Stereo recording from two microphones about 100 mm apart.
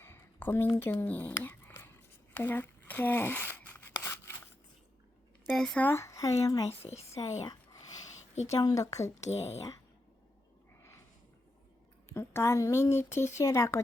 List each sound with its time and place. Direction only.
0.0 s a sound: 20° left (ahead or behind)
0.8 s speech: 20° left (ahead or behind)
1.3 s a sound: 20° left (ahead or behind)
2.3 s tearing: 20° left (ahead or behind)
5.5 s speech: 10° left (ahead or behind)
5.8 s speech: 25° left (ahead or behind)
7.4 s a sound: 40° left (ahead or behind)
8.5 s speech: 35° left (ahead or behind)
9.3 s speech: 90° left
12.1 s speech: 25° left (ahead or behind)